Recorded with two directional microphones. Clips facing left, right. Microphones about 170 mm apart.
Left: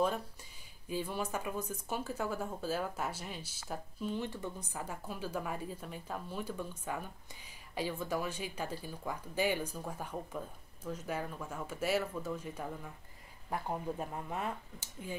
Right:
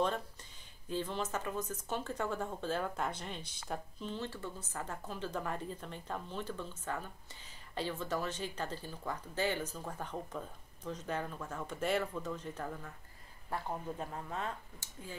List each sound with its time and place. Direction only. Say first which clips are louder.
0.0 s speech: left 1 dB; 10° left (ahead or behind)